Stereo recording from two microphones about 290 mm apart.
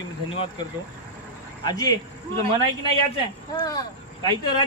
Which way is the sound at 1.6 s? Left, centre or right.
Centre.